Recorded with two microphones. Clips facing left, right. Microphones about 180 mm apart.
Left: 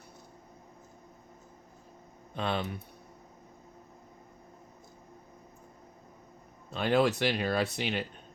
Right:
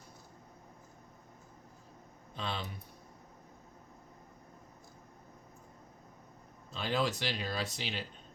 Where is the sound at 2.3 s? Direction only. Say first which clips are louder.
Left 7 dB; 60° left (ahead or behind).